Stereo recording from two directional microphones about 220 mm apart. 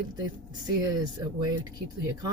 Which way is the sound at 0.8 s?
15° right (ahead or behind).